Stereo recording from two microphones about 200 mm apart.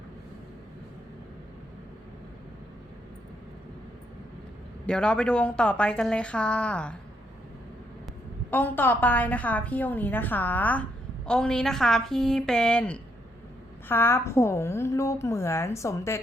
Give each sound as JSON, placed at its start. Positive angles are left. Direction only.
{"t": 4.9, "sound": "a woman's voice", "side_deg": 5}
{"t": 8.4, "sound": "a woman's voice", "side_deg": 10}